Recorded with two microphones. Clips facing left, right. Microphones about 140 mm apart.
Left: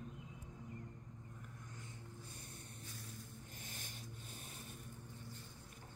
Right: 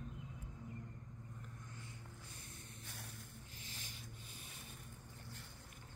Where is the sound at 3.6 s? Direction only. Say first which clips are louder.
Left 1 dB; 50° left (ahead or behind).